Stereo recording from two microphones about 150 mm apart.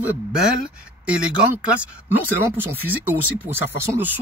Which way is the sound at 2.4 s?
15° right (ahead or behind).